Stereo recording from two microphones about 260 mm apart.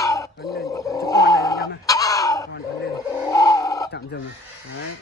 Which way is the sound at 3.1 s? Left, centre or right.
Centre.